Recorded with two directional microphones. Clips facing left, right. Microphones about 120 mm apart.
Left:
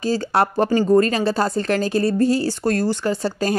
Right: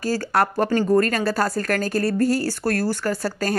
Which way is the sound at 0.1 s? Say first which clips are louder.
Left 2 dB; 25° left (ahead or behind).